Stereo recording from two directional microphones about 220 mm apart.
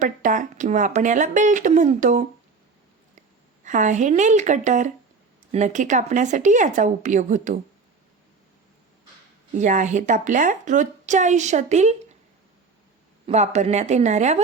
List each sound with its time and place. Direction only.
0.0 s a woman's voice: 35° right (ahead or behind)
9.6 s a woman's voice: 35° right (ahead or behind)
13.2 s a woman's voice: 30° right (ahead or behind)